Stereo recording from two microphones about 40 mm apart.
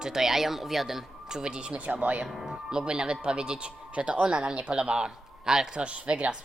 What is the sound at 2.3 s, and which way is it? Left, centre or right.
Speech, centre.